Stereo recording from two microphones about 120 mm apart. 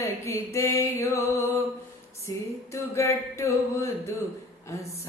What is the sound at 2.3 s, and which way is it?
Music, 25° left (ahead or behind).